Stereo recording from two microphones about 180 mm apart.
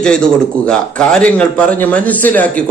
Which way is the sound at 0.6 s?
5° left (ahead or behind).